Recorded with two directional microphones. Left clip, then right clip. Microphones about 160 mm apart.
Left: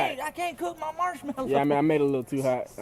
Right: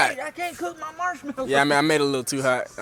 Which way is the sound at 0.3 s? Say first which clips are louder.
Right 1 dB; 30° left (ahead or behind).